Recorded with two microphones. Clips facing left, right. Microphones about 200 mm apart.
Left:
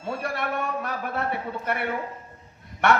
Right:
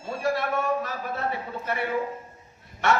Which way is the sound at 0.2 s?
60° left (ahead or behind).